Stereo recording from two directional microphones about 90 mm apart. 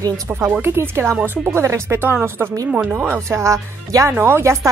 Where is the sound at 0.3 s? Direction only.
25° right (ahead or behind).